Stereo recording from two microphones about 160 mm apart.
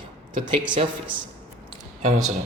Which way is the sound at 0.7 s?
30° right (ahead or behind).